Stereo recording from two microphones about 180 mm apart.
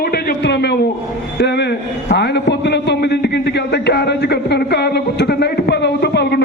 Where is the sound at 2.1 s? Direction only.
70° left (ahead or behind).